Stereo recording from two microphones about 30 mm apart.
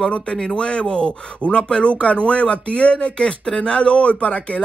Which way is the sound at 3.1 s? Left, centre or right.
Left.